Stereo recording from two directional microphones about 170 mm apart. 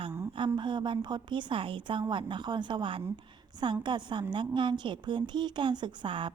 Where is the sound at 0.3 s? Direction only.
25° right (ahead or behind).